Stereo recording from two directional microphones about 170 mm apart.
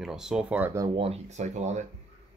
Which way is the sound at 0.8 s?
30° right (ahead or behind).